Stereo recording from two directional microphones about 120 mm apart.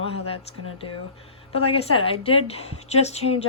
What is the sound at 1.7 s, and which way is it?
A woman's voice, 50° left (ahead or behind).